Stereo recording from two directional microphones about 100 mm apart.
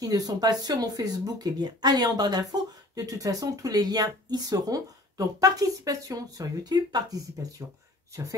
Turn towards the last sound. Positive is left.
turn(degrees=-40)  # may be behind; listen again after turning